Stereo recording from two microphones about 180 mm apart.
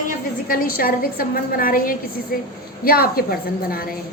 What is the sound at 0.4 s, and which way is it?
A woman's voice, 50° left (ahead or behind).